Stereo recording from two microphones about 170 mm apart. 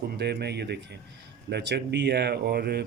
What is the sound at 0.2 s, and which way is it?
Speech, 75° right (ahead or behind).